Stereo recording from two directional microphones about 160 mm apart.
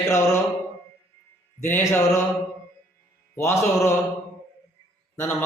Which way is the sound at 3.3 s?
15° left (ahead or behind).